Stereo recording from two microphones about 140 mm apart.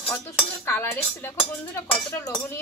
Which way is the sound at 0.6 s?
15° left (ahead or behind).